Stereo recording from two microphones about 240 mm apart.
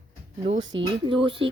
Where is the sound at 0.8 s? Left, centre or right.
Right.